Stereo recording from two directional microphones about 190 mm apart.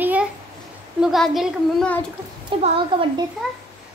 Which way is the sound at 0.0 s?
10° right (ahead or behind).